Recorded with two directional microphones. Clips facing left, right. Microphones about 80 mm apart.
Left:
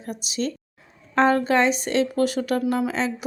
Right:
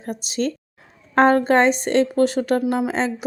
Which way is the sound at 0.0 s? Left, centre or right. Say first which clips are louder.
Right 4 dB; right.